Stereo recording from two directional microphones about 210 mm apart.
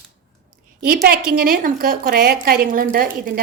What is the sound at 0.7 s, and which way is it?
A woman's voice, 45° right (ahead or behind).